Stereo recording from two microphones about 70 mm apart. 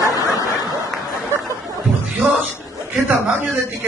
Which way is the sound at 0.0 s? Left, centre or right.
Left.